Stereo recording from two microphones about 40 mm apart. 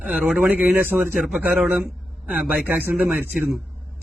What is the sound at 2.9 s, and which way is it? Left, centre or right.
Speech, right.